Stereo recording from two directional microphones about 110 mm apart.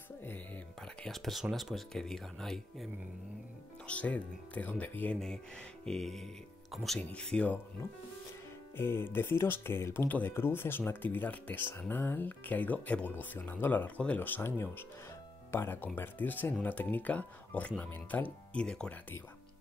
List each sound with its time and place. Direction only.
0.7 s speech: 5° left (ahead or behind)
8.7 s speech: 20° left (ahead or behind)